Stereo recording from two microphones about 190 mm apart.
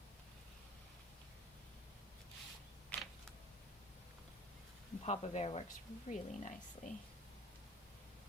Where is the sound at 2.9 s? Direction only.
5° left (ahead or behind).